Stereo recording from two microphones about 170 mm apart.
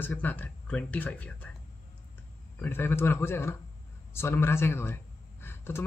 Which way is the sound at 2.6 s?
10° left (ahead or behind).